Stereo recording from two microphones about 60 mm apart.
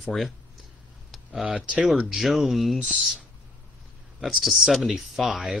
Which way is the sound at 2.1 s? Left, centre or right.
Centre.